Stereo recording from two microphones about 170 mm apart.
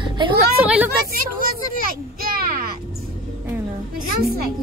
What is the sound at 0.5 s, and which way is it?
Speech, 10° right (ahead or behind).